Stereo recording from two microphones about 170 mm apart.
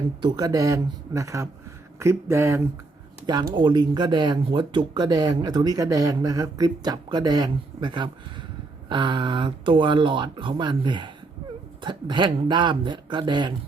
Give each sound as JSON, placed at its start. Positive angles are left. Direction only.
{"t": 0.2, "sound": "speech", "side_deg": -25}
{"t": 3.5, "sound": "speech", "side_deg": -25}